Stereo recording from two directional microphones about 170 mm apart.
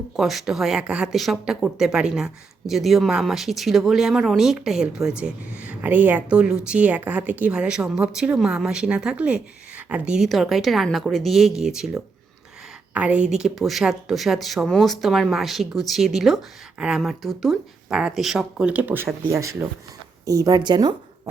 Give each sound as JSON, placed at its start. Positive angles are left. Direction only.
{"t": 0.2, "sound": "speech", "side_deg": 0}
{"t": 12.9, "sound": "a woman's voice", "side_deg": -10}